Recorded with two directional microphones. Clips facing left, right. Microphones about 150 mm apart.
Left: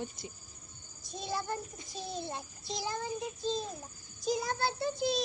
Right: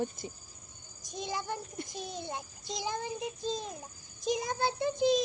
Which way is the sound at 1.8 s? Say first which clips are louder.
Right 11 dB; 65° right (ahead or behind).